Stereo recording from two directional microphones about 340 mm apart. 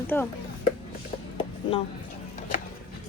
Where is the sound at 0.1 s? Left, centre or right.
Centre.